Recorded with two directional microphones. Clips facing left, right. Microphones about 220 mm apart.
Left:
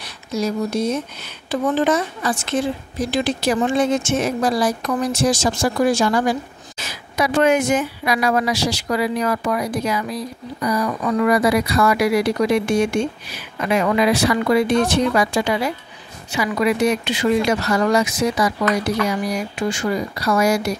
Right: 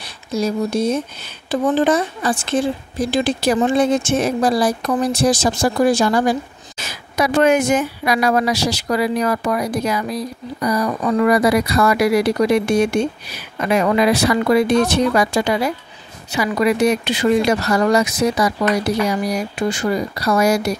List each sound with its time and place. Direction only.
0.3 s speech: 30° right (ahead or behind)